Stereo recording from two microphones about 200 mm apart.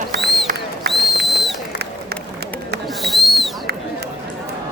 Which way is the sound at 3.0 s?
Centre (ahead or behind).